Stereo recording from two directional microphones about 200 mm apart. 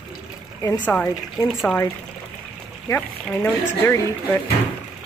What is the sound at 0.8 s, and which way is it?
Speech, 10° left (ahead or behind).